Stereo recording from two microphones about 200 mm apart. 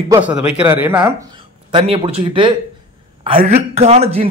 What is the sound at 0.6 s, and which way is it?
Speech, 10° right (ahead or behind).